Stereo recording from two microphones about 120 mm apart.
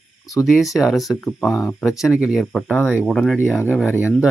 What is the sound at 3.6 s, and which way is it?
Speech, 20° left (ahead or behind).